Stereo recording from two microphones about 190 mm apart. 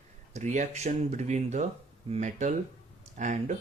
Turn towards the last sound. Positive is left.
turn(degrees=-40)  # may be behind; listen again after turning